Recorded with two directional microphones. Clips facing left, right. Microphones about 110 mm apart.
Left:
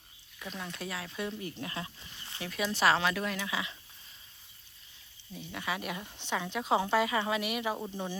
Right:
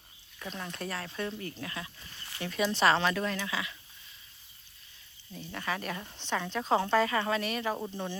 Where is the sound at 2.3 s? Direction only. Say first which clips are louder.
Right 3 dB; centre (ahead or behind).